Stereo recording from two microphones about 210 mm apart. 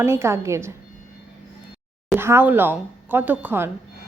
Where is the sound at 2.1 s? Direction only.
10° right (ahead or behind).